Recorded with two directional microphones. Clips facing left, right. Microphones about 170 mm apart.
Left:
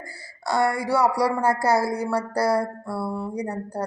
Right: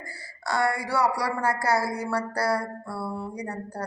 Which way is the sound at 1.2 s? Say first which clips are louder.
Left 5 dB; 15° left (ahead or behind).